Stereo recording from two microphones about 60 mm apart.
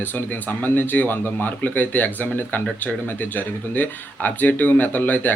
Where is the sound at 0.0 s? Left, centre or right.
Left.